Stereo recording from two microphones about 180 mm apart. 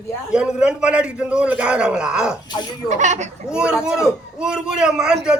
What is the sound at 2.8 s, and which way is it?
Speech, 40° right (ahead or behind).